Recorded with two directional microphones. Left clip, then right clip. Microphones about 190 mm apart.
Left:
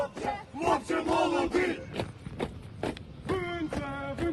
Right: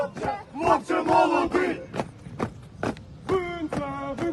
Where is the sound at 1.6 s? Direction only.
15° left (ahead or behind).